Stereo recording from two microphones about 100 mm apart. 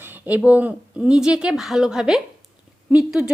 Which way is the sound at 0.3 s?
15° right (ahead or behind).